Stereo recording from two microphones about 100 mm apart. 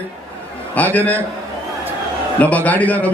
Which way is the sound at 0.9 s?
15° left (ahead or behind).